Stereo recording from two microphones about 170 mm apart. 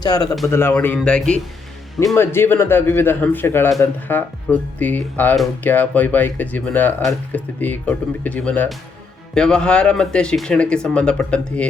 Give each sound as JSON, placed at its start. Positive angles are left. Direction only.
{"t": 0.0, "sound": "a man's voice", "side_deg": 25}